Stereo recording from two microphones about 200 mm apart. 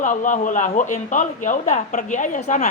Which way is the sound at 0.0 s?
40° left (ahead or behind).